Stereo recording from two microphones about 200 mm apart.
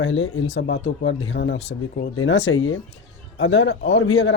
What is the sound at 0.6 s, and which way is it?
A man's voice, 65° left (ahead or behind).